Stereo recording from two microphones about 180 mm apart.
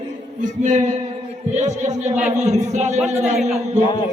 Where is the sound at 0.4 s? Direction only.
40° right (ahead or behind).